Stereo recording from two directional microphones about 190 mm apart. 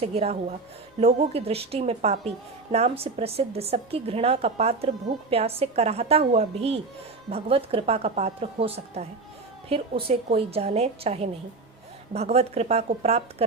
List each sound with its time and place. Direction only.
0.0 s a woman's voice: 30° right (ahead or behind)